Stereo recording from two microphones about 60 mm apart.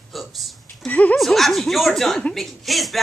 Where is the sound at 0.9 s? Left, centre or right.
Left.